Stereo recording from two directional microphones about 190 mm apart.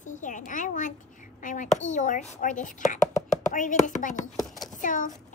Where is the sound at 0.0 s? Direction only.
40° left (ahead or behind).